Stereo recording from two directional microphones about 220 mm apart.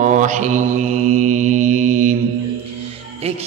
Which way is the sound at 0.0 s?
35° right (ahead or behind).